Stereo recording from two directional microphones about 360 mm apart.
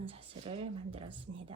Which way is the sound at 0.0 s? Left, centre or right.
Centre.